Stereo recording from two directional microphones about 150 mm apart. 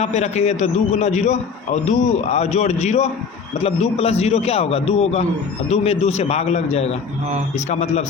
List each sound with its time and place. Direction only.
0.0 s a man's voice: 50° left (ahead or behind)